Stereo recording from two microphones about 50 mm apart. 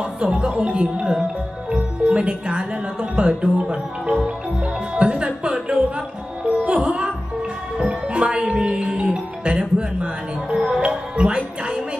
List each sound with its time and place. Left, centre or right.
0.0 s music: right
0.6 s speech: right
4.9 s music: centre
6.8 s music: centre
8.1 s music: centre